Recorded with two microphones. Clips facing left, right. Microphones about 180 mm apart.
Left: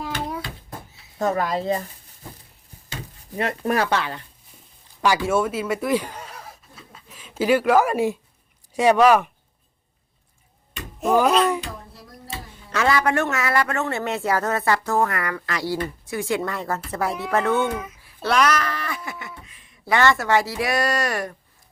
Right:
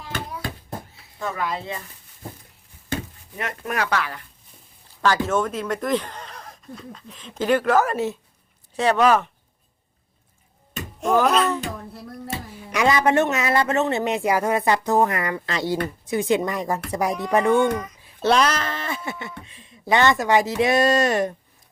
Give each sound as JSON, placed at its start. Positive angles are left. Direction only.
{"t": 1.2, "sound": "speech", "side_deg": 40}
{"t": 3.3, "sound": "speech", "side_deg": 30}
{"t": 5.0, "sound": "speech", "side_deg": 10}
{"t": 11.0, "sound": "a sound", "side_deg": 5}
{"t": 12.7, "sound": "speech", "side_deg": -20}
{"t": 17.7, "sound": "speech", "side_deg": 5}
{"t": 18.0, "sound": "speech", "side_deg": -25}